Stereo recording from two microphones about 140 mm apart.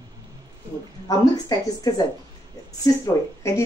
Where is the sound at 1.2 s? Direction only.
30° left (ahead or behind).